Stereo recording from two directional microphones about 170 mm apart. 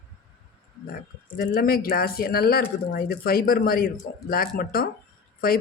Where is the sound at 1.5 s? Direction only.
60° left (ahead or behind).